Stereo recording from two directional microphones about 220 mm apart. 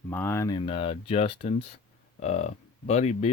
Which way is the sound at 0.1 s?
10° left (ahead or behind).